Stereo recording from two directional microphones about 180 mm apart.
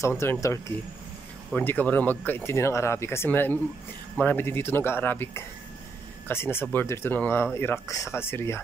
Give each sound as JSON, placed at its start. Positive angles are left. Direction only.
{"t": 0.2, "sound": "speech", "side_deg": 15}